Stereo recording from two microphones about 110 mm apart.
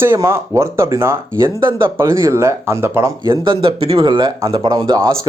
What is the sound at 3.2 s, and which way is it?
Speech, 40° right (ahead or behind).